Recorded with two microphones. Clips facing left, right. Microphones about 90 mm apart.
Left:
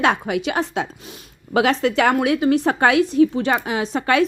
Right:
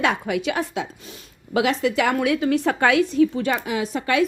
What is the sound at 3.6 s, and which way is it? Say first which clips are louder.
Speech: left 3 dB; 35° left (ahead or behind).